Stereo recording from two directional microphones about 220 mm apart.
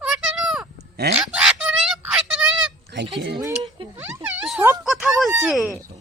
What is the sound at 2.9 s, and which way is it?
Speech, 50° right (ahead or behind).